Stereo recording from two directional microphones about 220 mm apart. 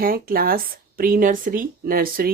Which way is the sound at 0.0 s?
40° right (ahead or behind).